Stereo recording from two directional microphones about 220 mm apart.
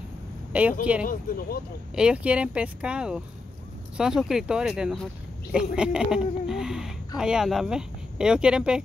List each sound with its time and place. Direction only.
0.5 s speech: 5° right (ahead or behind)
1.0 s speech: 40° left (ahead or behind)
2.0 s speech: 5° right (ahead or behind)